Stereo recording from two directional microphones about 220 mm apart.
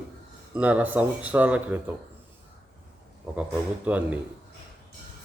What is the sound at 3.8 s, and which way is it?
Speech, 5° right (ahead or behind).